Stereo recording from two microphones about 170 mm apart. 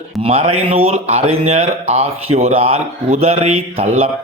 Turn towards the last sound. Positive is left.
turn(degrees=-35)  # may be behind; listen again after turning